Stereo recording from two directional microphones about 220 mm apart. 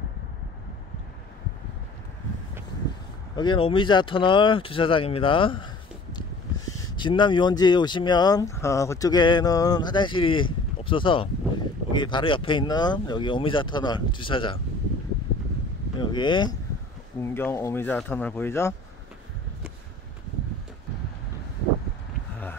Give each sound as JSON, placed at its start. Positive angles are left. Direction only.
{"t": 3.3, "sound": "speech", "side_deg": 20}
{"t": 7.0, "sound": "speech", "side_deg": 20}
{"t": 16.1, "sound": "speech", "side_deg": 20}